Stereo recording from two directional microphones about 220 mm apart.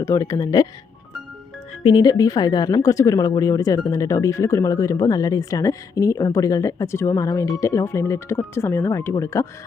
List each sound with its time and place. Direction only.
0.0 s speech: 15° left (ahead or behind)
1.8 s speech: 20° left (ahead or behind)